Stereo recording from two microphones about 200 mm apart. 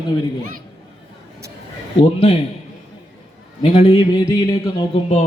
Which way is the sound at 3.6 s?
30° left (ahead or behind).